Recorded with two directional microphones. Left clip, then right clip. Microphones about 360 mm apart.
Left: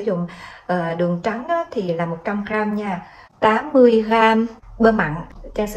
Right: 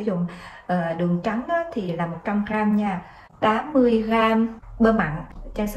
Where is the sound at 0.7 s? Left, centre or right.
Left.